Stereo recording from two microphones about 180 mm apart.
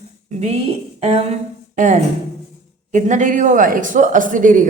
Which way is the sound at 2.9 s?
45° right (ahead or behind).